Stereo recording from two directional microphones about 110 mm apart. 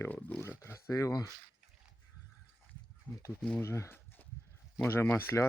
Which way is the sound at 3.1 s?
15° left (ahead or behind).